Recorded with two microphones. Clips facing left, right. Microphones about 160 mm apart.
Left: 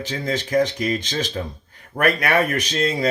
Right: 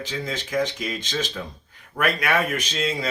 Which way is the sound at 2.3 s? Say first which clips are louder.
Left 4 dB; 65° left (ahead or behind).